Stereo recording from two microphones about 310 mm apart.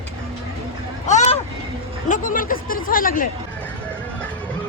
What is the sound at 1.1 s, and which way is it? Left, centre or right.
Vehicle, left.